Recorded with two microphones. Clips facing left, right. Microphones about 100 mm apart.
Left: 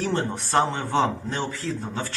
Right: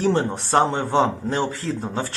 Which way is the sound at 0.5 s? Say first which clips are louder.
Right 4 dB; 25° right (ahead or behind).